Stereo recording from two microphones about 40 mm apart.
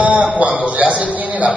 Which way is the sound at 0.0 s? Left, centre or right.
Right.